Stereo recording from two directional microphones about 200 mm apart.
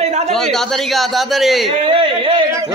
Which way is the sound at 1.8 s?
25° right (ahead or behind).